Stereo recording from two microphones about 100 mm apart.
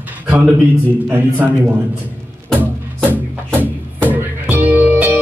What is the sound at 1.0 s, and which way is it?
Speech, 15° right (ahead or behind).